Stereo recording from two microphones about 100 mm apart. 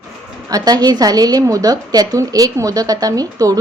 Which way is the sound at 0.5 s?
40° right (ahead or behind).